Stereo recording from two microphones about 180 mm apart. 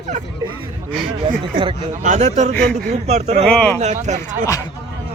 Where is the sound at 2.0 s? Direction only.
40° right (ahead or behind).